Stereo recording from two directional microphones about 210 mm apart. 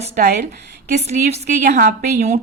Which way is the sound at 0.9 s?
30° right (ahead or behind).